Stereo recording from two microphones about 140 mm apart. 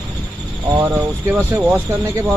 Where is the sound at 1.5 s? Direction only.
20° right (ahead or behind).